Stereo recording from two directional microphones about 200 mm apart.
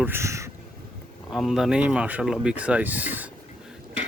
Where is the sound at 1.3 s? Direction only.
Centre (ahead or behind).